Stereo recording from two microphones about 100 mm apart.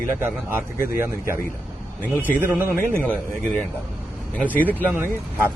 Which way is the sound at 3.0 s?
15° left (ahead or behind).